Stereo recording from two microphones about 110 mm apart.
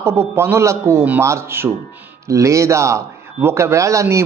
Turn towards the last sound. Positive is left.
turn(degrees=-25)  # may be behind; listen again after turning